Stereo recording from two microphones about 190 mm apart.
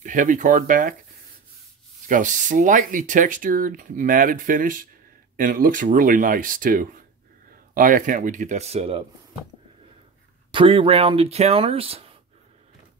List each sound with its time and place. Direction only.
0.0 s speech: 40° right (ahead or behind)
2.0 s speech: 45° right (ahead or behind)
10.5 s speech: 25° right (ahead or behind)